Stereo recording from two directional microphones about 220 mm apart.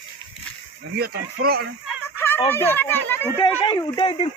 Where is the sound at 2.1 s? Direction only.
10° left (ahead or behind).